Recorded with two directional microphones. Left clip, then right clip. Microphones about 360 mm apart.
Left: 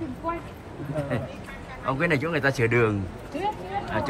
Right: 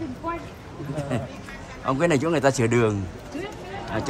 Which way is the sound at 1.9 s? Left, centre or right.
Centre.